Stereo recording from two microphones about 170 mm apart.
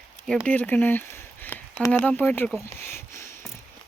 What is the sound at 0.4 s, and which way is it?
Speech, 10° left (ahead or behind).